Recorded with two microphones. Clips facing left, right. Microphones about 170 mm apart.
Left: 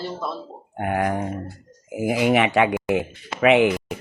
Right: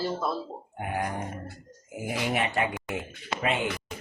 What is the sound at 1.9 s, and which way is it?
Speech, 90° left.